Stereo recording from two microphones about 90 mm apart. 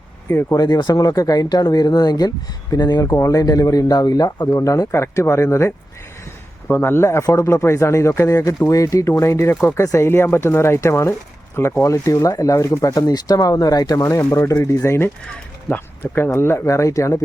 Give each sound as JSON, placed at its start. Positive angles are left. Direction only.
{"t": 0.5, "sound": "speech", "side_deg": 50}
{"t": 3.1, "sound": "speech", "side_deg": 35}
{"t": 4.4, "sound": "speech", "side_deg": 30}